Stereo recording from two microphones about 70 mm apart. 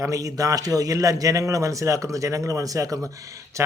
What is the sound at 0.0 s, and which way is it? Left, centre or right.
Speech, right.